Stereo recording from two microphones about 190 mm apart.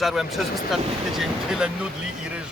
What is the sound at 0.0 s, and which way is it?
Speech, centre (ahead or behind).